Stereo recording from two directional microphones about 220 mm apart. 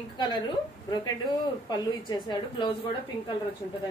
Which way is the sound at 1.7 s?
20° left (ahead or behind).